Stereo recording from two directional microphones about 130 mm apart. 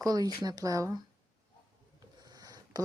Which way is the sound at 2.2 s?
30° right (ahead or behind).